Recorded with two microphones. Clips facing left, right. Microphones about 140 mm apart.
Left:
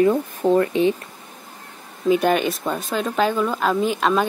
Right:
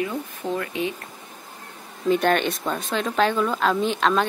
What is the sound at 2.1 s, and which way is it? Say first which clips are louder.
Speech: left 2 dB; 5° left (ahead or behind).